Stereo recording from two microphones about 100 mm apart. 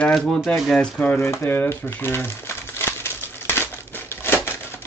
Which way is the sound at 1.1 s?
30° left (ahead or behind).